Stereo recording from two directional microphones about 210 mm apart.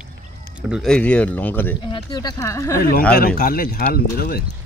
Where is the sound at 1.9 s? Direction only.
20° left (ahead or behind).